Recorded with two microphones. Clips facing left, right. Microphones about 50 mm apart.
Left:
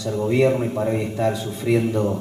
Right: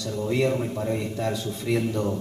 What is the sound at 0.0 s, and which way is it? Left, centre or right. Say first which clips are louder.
Speech: left 6 dB; centre.